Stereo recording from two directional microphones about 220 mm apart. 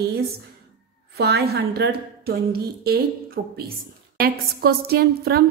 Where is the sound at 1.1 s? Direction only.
45° right (ahead or behind).